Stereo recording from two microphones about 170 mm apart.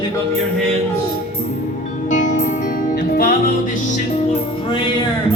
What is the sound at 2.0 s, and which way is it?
Music, 45° left (ahead or behind).